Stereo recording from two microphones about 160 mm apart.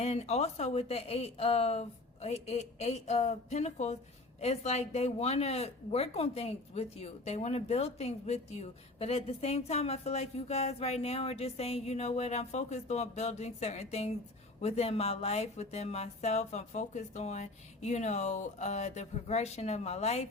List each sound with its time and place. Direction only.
0.0 s speech: 40° left (ahead or behind)